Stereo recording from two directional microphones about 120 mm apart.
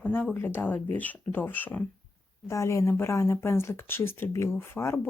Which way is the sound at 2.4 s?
25° left (ahead or behind).